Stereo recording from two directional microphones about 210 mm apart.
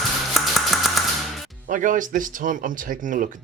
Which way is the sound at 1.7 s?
40° right (ahead or behind).